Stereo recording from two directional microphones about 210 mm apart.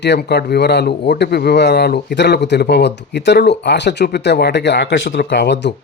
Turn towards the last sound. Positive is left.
turn(degrees=55)  # may be behind; listen again after turning